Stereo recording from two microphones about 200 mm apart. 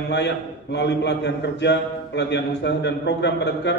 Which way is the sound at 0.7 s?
60° left (ahead or behind).